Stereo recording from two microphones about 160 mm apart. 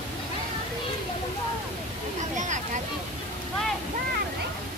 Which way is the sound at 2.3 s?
50° right (ahead or behind).